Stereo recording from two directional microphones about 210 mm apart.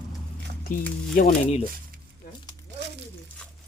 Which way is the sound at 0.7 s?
40° left (ahead or behind).